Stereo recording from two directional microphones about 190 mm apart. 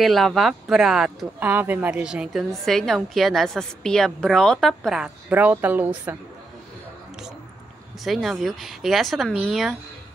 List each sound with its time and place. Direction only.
0.0 s speech: centre (ahead or behind)
8.0 s speech: centre (ahead or behind)